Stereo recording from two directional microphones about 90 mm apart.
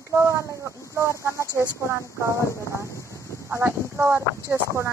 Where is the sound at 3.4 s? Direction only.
30° right (ahead or behind).